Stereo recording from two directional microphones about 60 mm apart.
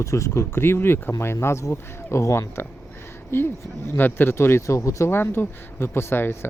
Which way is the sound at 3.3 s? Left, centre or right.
Left.